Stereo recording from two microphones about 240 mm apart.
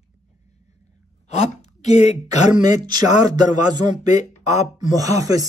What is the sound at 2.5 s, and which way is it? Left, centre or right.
Speech, centre.